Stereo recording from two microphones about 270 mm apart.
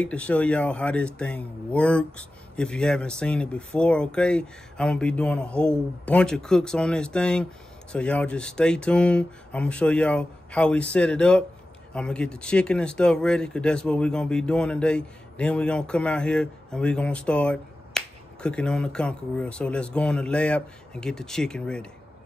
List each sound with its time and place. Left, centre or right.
0.0 s speech: centre